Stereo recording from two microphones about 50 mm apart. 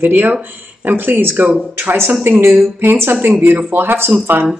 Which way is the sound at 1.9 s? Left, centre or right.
Right.